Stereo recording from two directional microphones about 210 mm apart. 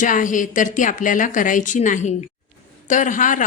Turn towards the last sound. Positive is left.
turn(degrees=40)  # may be behind; listen again after turning